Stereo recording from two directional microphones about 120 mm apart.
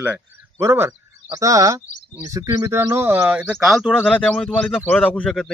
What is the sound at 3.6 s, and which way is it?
A man's voice, centre (ahead or behind).